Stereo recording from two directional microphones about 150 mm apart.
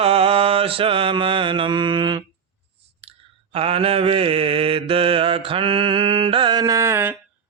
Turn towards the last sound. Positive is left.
turn(degrees=-15)  # may be behind; listen again after turning